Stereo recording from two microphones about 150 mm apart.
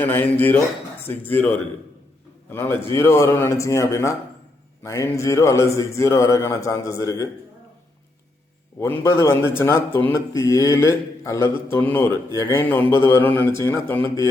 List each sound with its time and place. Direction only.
0.0 s speech: 10° left (ahead or behind)
8.8 s speech: 15° left (ahead or behind)